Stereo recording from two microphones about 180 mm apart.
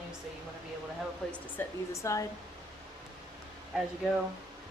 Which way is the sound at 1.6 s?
15° left (ahead or behind).